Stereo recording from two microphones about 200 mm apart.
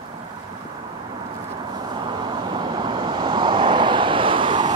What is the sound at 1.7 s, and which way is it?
Vehicle, 20° right (ahead or behind).